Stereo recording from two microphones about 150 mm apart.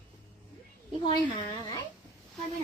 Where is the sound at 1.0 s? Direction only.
30° left (ahead or behind).